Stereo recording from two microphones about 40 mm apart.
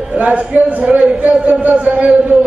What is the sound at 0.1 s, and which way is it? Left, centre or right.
A man's voice, right.